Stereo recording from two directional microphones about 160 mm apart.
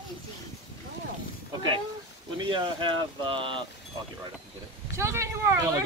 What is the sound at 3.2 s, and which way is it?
Speech, 30° right (ahead or behind).